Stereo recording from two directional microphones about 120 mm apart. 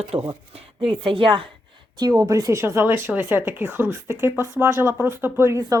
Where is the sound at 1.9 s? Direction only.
30° right (ahead or behind).